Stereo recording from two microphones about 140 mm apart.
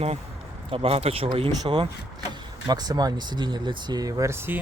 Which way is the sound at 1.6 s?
30° right (ahead or behind).